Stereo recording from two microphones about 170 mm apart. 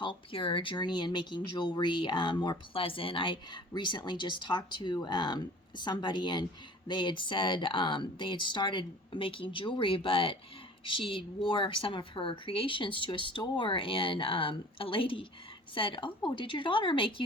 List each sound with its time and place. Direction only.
0.0 s speech: 30° left (ahead or behind)